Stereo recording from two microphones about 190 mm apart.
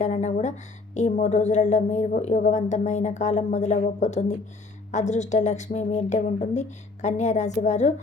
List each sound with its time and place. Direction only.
0.0 s a woman's voice: 35° left (ahead or behind)